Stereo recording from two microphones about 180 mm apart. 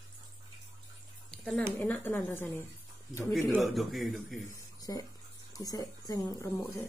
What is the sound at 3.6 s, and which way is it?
Speech, centre (ahead or behind).